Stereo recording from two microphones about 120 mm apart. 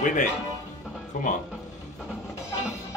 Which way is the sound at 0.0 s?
90° left.